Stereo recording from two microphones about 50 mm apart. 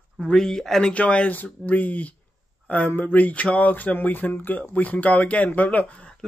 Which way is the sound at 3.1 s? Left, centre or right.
Left.